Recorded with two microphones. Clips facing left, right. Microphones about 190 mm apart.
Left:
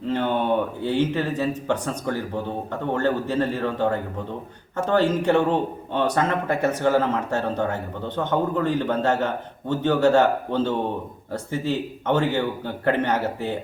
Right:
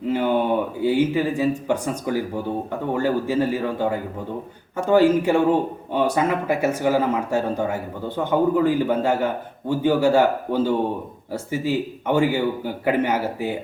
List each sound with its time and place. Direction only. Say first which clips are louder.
0.1 s speech: right 2 dB; 10° right (ahead or behind)